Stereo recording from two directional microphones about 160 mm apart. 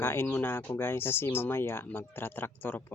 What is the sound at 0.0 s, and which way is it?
Speech, 15° left (ahead or behind).